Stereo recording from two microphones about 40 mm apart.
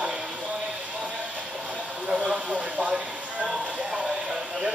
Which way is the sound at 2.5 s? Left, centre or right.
Right.